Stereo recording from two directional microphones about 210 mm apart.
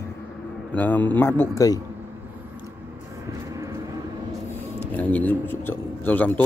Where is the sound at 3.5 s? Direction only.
15° right (ahead or behind).